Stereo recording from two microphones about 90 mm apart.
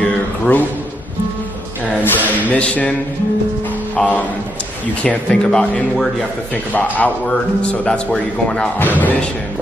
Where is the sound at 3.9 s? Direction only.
15° left (ahead or behind).